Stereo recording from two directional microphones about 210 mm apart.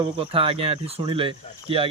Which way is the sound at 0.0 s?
25° right (ahead or behind).